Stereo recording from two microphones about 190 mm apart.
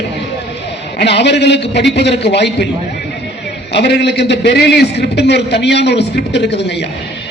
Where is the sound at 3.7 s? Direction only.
60° left (ahead or behind).